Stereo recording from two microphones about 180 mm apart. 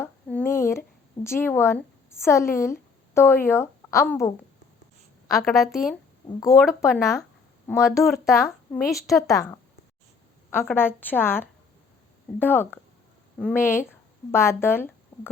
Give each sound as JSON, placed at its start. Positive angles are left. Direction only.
{"t": 0.0, "sound": "a sound", "side_deg": 10}
{"t": 3.2, "sound": "speech", "side_deg": 15}
{"t": 5.4, "sound": "a woman's voice", "side_deg": 0}
{"t": 7.7, "sound": "speech", "side_deg": 15}